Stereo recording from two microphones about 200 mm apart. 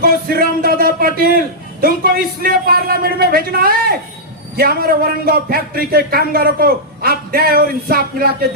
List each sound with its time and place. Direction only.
0.0 s a man's voice: 45° right (ahead or behind)